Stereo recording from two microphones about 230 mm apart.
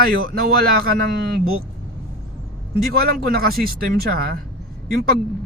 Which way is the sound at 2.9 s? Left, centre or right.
Right.